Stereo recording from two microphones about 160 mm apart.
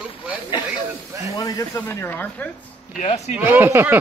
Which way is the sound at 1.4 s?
20° left (ahead or behind).